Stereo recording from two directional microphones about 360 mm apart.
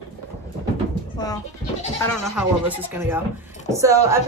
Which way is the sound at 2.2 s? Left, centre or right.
Centre.